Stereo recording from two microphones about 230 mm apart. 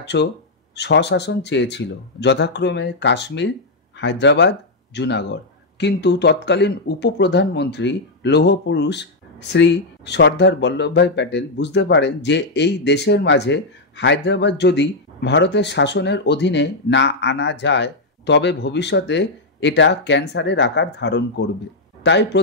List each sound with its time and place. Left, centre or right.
0.0 s speech: left